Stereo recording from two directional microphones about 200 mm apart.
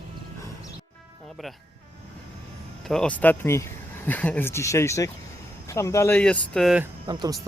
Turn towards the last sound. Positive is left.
turn(degrees=-20)  # may be behind; listen again after turning